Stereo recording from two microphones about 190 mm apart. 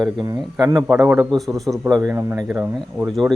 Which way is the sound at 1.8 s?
15° right (ahead or behind).